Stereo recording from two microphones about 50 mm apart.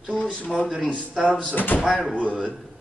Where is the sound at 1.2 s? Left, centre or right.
Right.